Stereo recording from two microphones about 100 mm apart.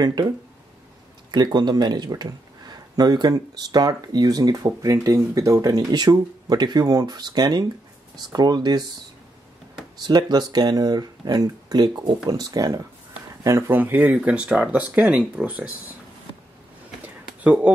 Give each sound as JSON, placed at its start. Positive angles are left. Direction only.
{"t": 0.0, "sound": "speech", "side_deg": -45}
{"t": 1.3, "sound": "speech", "side_deg": -45}
{"t": 9.9, "sound": "speech", "side_deg": -45}
{"t": 17.0, "sound": "a sound", "side_deg": -15}